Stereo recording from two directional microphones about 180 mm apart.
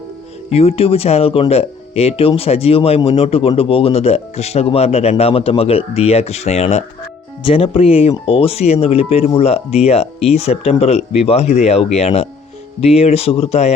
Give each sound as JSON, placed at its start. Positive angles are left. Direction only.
{"t": 0.5, "sound": "speech", "side_deg": 35}